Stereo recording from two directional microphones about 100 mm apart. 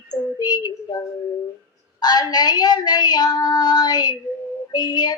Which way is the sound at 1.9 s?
45° left (ahead or behind).